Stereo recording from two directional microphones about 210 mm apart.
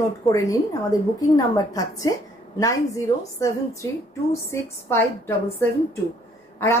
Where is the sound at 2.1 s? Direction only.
20° left (ahead or behind).